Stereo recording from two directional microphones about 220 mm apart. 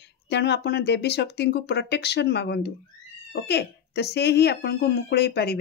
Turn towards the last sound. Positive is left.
turn(degrees=45)  # may be behind; listen again after turning